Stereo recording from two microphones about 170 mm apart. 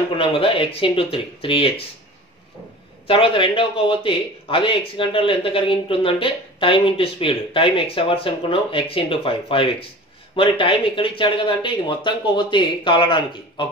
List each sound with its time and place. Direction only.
0.1 s speech: 30° left (ahead or behind)
3.1 s speech: 30° left (ahead or behind)